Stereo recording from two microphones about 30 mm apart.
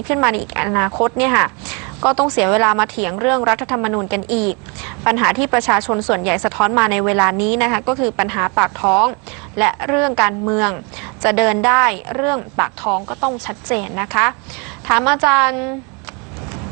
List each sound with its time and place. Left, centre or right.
0.1 s a woman's voice: centre